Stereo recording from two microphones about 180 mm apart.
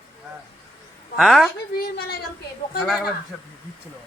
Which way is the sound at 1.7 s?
55° left (ahead or behind).